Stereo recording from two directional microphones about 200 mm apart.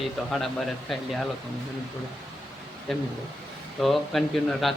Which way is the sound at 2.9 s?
Centre (ahead or behind).